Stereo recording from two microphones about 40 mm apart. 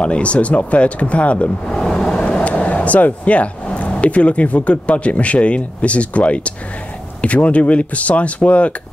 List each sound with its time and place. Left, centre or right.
0.0 s speech: left
1.7 s vehicle: centre
2.4 s a sound: left
4.0 s speech: left